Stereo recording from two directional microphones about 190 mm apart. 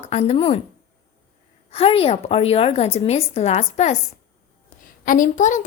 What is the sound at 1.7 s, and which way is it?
A woman's voice, 30° left (ahead or behind).